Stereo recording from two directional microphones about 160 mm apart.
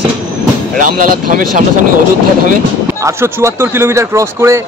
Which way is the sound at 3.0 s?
15° right (ahead or behind).